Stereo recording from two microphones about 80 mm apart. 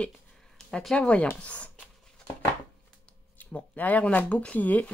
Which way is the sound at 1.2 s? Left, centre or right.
Left.